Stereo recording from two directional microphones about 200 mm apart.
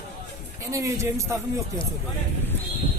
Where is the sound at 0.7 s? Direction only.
15° right (ahead or behind).